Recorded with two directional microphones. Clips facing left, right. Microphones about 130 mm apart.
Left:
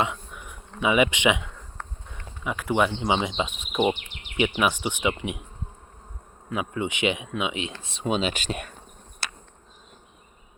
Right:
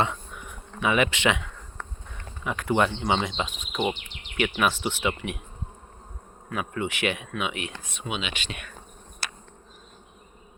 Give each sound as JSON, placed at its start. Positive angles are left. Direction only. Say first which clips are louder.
{"t": 0.0, "sound": "insect", "louder": "even", "side_deg": 10}
{"t": 2.2, "sound": "speech", "louder": "even", "side_deg": 10}
{"t": 3.7, "sound": "insect", "louder": "left 5 dB", "side_deg": 15}
{"t": 4.4, "sound": "speech", "louder": "left 1 dB", "side_deg": 15}
{"t": 6.5, "sound": "speech", "louder": "left 1 dB", "side_deg": 20}